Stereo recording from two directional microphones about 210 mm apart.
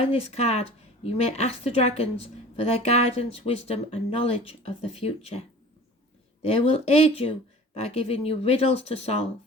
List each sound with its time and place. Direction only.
0.0 s speech: 30° left (ahead or behind)
6.4 s speech: 30° left (ahead or behind)